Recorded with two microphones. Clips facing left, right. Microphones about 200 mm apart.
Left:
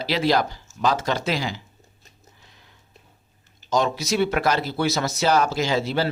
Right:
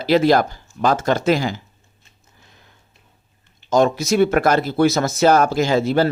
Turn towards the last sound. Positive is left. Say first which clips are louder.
# right 6 dB
turn(degrees=-50)  # may be behind; listen again after turning